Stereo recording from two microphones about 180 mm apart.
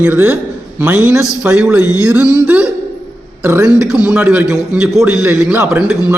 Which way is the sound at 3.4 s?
15° right (ahead or behind).